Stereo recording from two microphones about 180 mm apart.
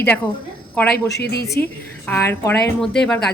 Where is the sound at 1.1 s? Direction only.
60° left (ahead or behind).